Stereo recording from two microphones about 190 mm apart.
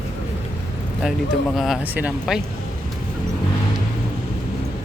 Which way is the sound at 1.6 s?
Centre (ahead or behind).